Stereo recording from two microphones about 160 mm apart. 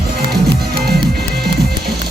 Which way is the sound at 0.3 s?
85° right.